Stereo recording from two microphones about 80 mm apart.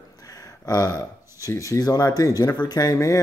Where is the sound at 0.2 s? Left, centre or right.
Left.